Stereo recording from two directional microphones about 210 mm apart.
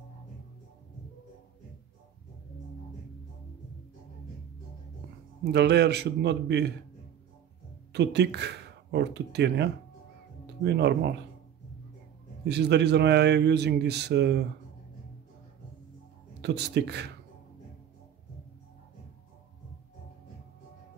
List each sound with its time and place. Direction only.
5.5 s a man's voice: 55° right (ahead or behind)
7.9 s speech: 55° right (ahead or behind)
12.4 s a man's voice: 55° right (ahead or behind)
16.3 s speech: 50° right (ahead or behind)